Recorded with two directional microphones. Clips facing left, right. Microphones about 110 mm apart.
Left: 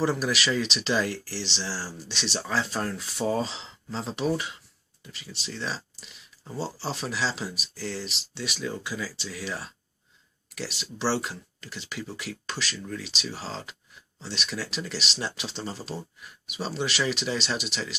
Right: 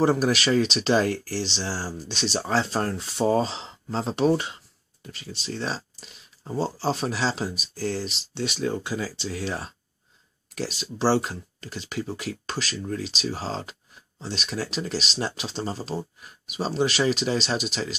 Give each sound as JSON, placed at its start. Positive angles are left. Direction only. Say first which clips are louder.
{"t": 0.0, "sound": "speech", "louder": "right 5 dB", "side_deg": -45}